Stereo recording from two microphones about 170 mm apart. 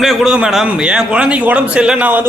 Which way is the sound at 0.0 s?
Centre (ahead or behind).